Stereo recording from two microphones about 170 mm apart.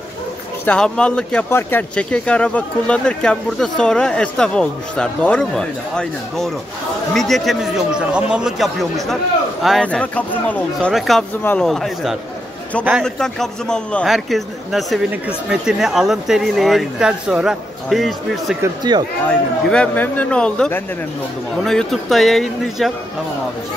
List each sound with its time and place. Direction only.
0.7 s speech: 5° left (ahead or behind)
18.6 s speech: 25° right (ahead or behind)
19.2 s speech: 5° left (ahead or behind)